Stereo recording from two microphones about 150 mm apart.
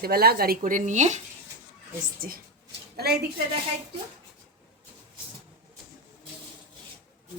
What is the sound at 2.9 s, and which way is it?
Speech, 90° right.